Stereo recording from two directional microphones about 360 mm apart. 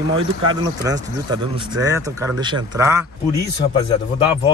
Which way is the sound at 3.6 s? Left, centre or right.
Centre.